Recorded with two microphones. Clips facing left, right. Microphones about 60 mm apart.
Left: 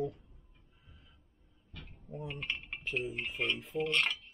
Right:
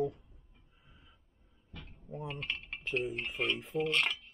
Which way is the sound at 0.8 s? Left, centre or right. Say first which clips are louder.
Right 1 dB; centre.